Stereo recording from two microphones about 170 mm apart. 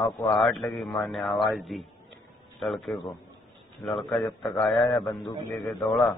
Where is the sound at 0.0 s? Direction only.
25° left (ahead or behind).